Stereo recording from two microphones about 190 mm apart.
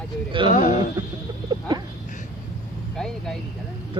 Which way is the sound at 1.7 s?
20° right (ahead or behind).